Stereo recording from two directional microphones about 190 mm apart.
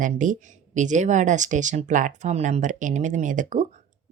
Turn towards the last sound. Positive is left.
turn(degrees=-40)  # may be behind; listen again after turning